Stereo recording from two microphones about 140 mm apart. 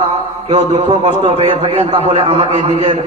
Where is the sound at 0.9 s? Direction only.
35° right (ahead or behind).